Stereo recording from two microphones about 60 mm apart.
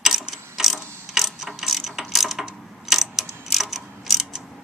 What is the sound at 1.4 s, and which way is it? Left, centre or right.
Mechanisms, centre.